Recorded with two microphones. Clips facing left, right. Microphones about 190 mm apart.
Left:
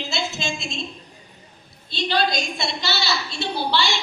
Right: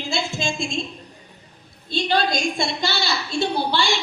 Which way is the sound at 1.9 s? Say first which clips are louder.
Right 1 dB; 50° right (ahead or behind).